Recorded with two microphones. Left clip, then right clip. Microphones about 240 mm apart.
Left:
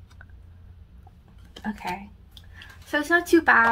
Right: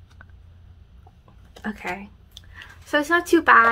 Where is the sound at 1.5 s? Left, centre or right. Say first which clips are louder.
Right 1 dB; centre.